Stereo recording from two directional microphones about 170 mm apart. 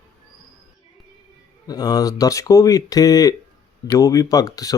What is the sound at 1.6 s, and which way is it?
Speech, 20° left (ahead or behind).